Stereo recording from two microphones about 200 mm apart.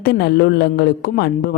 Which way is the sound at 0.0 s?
55° left (ahead or behind).